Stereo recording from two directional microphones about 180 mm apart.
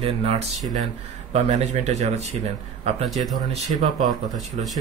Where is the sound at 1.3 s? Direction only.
40° right (ahead or behind).